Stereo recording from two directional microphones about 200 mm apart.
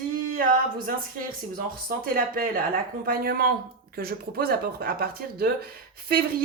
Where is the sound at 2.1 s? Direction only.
45° right (ahead or behind).